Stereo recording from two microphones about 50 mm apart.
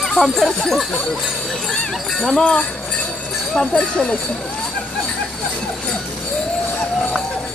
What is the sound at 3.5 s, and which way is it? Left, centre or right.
Speech, centre.